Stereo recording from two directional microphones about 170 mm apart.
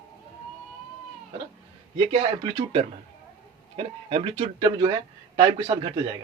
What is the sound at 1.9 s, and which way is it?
Speech, 30° right (ahead or behind).